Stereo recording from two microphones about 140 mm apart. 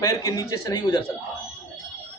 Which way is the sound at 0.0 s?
25° left (ahead or behind).